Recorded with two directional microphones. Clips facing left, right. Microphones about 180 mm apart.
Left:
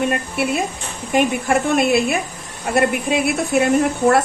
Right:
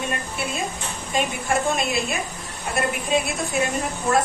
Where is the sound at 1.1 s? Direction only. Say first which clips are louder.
Left 7 dB; 65° left (ahead or behind).